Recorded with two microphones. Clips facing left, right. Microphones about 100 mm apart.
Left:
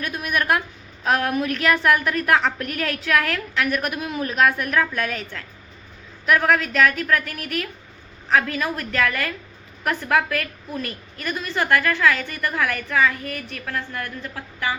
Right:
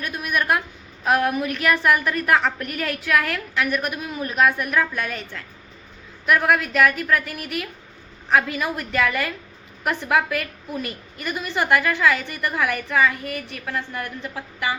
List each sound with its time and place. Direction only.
0.0 s a woman's voice: centre (ahead or behind)